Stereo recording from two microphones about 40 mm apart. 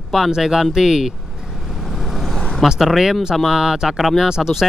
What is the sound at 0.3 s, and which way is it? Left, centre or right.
Speech, centre.